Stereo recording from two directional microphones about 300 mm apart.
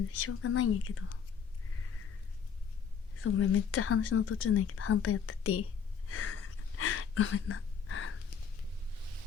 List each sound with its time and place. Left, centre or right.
0.2 s speech: left
3.2 s speech: left
6.1 s a sound: left